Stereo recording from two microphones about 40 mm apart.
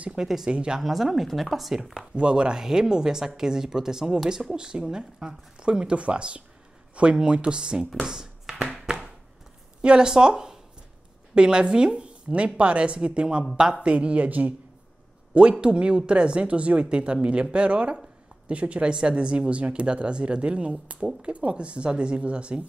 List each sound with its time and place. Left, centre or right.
0.5 s speech: right
0.7 s speech: centre
2.1 s speech: right
8.8 s a sound: centre
9.8 s a woman's voice: right
12.3 s speech: right
15.6 s speech: right